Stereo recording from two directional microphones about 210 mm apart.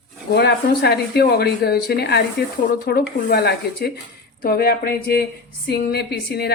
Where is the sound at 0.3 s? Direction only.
50° left (ahead or behind).